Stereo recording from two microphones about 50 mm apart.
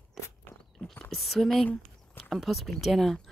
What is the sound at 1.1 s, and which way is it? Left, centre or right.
Speech, centre.